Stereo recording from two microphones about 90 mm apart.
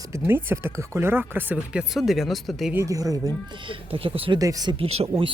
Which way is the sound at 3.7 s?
90° right.